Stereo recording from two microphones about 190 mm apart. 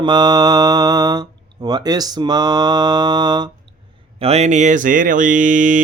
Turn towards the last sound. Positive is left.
turn(degrees=-45)  # may be behind; listen again after turning